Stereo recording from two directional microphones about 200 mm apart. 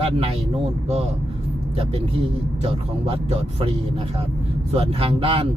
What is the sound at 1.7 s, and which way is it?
Speech, 30° right (ahead or behind).